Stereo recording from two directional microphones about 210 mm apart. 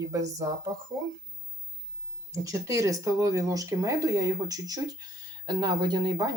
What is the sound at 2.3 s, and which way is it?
Speech, 15° right (ahead or behind).